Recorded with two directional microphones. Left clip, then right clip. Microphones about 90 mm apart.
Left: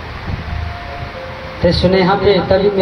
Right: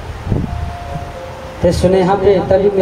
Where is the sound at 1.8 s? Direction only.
45° right (ahead or behind).